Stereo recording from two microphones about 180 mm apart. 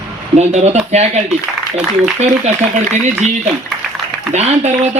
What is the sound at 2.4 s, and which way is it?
Speech, 40° right (ahead or behind).